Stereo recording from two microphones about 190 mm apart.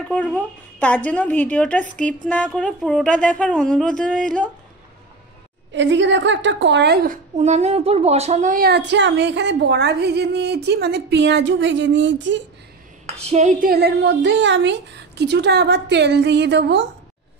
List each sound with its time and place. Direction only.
0.1 s speech: 5° left (ahead or behind)
5.7 s a woman's voice: 70° right (ahead or behind)
7.3 s a woman's voice: 35° right (ahead or behind); by 12.4 s 75° right (ahead or behind)
13.2 s a woman's voice: 35° right (ahead or behind); by 16.8 s 65° right (ahead or behind)